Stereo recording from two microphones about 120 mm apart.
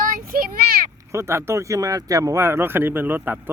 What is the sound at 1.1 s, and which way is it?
Speech, 25° right (ahead or behind).